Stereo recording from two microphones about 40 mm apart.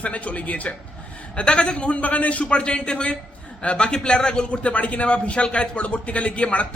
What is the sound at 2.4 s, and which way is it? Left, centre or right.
A man's voice, left.